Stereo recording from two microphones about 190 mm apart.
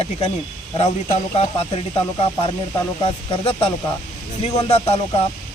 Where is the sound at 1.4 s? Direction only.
30° left (ahead or behind).